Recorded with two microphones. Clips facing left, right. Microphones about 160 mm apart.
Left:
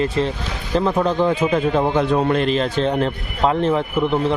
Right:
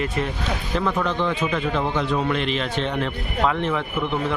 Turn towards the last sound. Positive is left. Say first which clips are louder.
# left 6 dB
turn(degrees=35)  # may be behind; listen again after turning